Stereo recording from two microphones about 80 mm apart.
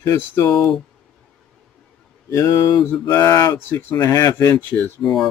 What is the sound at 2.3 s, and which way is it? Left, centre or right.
Mantra, left.